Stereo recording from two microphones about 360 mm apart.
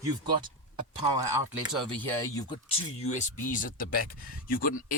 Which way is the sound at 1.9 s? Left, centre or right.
Centre.